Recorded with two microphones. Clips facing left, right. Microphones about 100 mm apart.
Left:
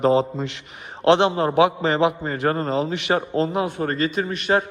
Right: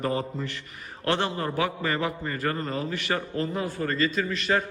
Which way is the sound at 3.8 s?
50° left (ahead or behind).